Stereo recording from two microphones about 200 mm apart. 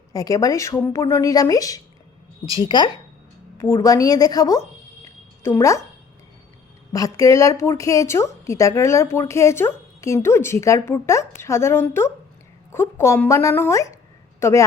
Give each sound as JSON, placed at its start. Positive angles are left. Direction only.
{"t": 0.1, "sound": "a woman's voice", "side_deg": 15}
{"t": 6.9, "sound": "a woman's voice", "side_deg": 15}